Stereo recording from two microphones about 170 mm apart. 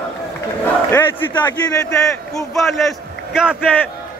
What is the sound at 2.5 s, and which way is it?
A man's voice, centre (ahead or behind).